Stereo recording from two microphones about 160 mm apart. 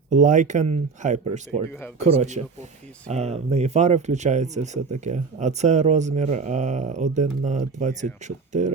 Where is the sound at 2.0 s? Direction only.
45° right (ahead or behind).